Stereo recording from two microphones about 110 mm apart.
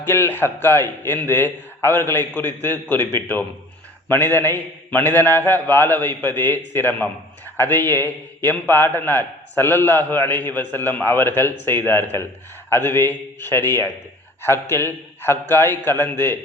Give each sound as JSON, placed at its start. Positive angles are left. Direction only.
{"t": 0.0, "sound": "a man's voice", "side_deg": 20}